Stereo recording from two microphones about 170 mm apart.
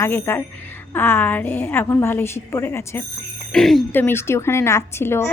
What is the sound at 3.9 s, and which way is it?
A woman's voice, 15° left (ahead or behind).